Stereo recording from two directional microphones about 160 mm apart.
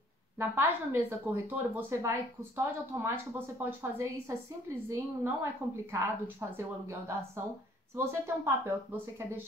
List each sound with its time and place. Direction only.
0.4 s a woman's voice: 15° right (ahead or behind)